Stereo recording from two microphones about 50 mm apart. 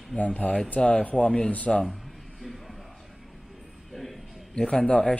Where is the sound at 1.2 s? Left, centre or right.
Centre.